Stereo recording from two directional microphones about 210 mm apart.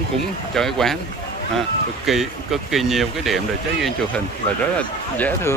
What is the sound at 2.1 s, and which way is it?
Speech, centre (ahead or behind).